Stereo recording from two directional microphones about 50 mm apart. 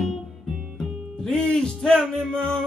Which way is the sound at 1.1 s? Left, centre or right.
Centre.